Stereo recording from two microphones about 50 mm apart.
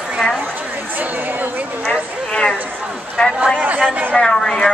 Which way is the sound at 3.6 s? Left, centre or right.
Right.